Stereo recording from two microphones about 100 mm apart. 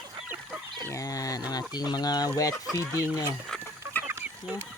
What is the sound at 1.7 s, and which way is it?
Speech, 45° left (ahead or behind).